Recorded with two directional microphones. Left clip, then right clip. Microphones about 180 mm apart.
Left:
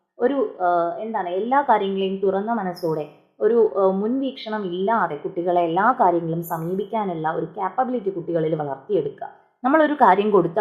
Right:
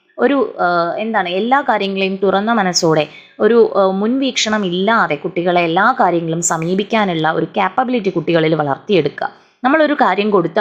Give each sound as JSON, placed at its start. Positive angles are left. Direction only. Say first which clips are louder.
{"t": 0.2, "sound": "a woman's voice", "louder": "right 7 dB", "side_deg": -20}